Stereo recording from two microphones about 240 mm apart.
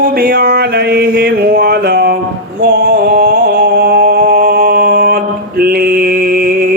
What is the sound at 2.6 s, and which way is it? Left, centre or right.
Music, right.